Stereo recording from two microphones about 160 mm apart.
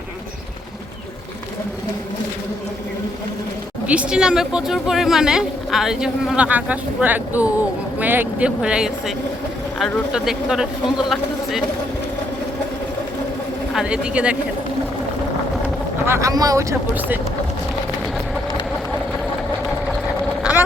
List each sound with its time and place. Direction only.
3.8 s speech: 5° right (ahead or behind)
13.7 s speech: 5° right (ahead or behind)
16.0 s speech: 20° right (ahead or behind)